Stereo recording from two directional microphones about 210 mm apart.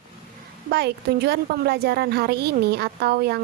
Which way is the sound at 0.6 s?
50° right (ahead or behind).